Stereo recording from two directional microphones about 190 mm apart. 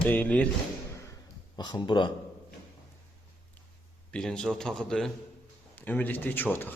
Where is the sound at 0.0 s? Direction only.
10° left (ahead or behind).